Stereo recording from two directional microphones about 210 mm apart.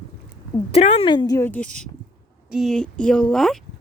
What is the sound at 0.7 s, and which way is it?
A woman's voice, 30° left (ahead or behind).